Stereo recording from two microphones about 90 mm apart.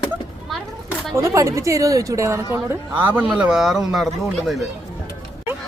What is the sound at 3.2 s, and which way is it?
Speech, 5° right (ahead or behind).